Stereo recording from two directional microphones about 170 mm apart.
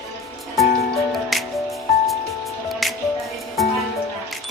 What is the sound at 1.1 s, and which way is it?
Music, centre (ahead or behind).